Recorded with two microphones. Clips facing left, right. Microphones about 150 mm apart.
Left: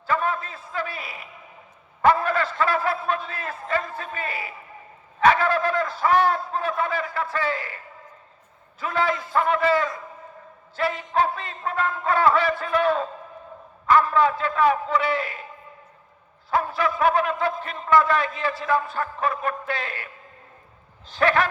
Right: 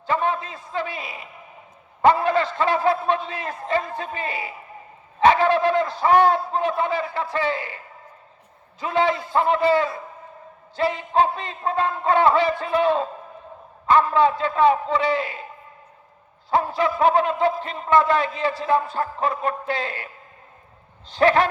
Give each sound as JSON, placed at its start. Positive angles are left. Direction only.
{"t": 0.1, "sound": "a sound", "side_deg": -25}
{"t": 3.7, "sound": "music", "side_deg": -25}
{"t": 8.8, "sound": "music", "side_deg": -25}
{"t": 16.5, "sound": "music", "side_deg": -25}
{"t": 21.2, "sound": "music", "side_deg": -30}